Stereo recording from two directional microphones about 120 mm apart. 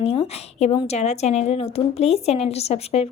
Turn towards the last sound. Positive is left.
turn(degrees=60)  # may be behind; listen again after turning